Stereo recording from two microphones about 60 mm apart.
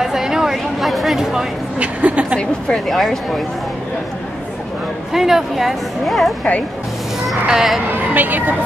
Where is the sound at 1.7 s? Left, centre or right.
Right.